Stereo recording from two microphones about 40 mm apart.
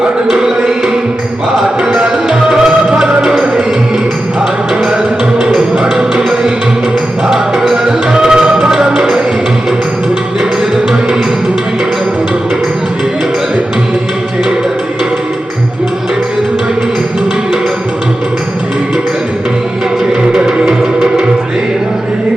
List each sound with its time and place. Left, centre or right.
0.3 s music: centre
2.5 s music: centre
5.4 s music: centre
20.3 s music: right